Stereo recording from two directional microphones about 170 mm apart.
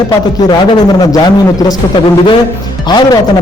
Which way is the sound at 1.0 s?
20° left (ahead or behind).